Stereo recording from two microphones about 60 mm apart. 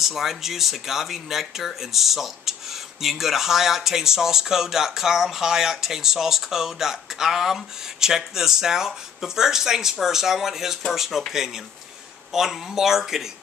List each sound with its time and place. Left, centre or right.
0.1 s speech: centre